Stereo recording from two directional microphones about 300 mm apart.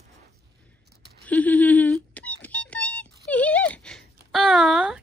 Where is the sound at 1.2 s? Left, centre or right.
Centre.